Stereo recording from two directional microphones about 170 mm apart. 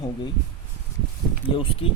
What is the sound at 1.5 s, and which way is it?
Speech, 30° left (ahead or behind).